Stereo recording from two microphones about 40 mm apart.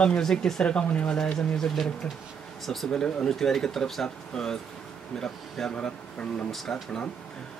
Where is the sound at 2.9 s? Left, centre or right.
Centre.